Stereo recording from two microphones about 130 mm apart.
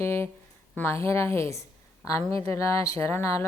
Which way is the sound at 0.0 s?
20° left (ahead or behind).